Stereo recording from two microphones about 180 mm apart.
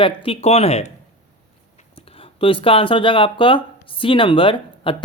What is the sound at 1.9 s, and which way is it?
Speech, 30° left (ahead or behind).